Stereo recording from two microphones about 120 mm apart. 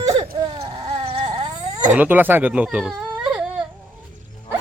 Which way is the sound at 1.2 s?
40° right (ahead or behind).